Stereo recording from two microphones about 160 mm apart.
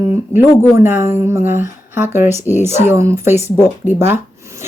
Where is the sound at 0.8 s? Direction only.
15° right (ahead or behind).